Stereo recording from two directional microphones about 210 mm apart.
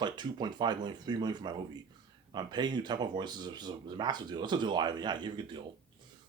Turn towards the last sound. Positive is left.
turn(degrees=-20)  # may be behind; listen again after turning